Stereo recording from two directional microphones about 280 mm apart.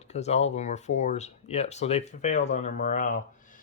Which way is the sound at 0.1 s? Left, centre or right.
Left.